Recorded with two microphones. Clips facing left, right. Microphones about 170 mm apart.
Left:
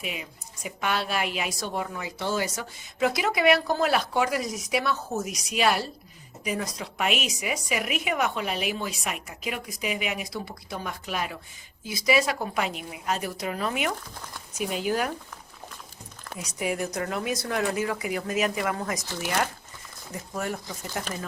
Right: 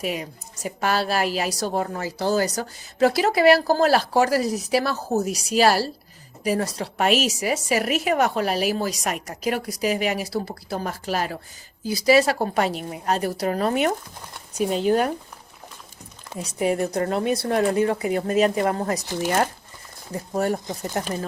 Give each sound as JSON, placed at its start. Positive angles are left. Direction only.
{"t": 0.0, "sound": "a woman's voice", "side_deg": -40}
{"t": 16.6, "sound": "a woman's voice", "side_deg": -35}
{"t": 19.0, "sound": "speech", "side_deg": -20}
{"t": 20.1, "sound": "a woman's voice", "side_deg": -35}